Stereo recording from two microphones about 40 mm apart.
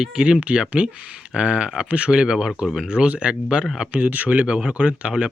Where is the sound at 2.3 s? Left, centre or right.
Centre.